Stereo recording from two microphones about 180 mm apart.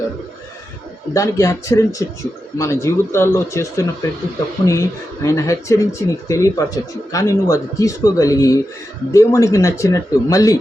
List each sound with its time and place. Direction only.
1.1 s speech: 15° left (ahead or behind)